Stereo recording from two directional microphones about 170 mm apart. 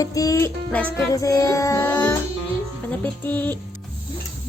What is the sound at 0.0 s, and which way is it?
Music, 20° left (ahead or behind).